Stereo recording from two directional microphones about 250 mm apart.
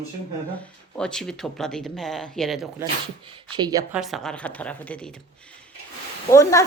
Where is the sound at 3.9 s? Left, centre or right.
Centre.